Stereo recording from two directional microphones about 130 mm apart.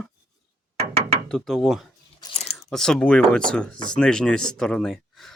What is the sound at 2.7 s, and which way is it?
Speech, 5° left (ahead or behind).